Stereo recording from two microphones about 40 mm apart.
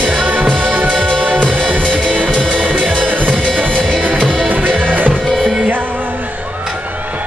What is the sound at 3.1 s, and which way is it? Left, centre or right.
Music, right.